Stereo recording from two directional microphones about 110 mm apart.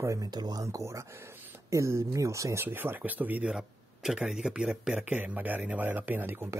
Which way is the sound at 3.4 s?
5° right (ahead or behind).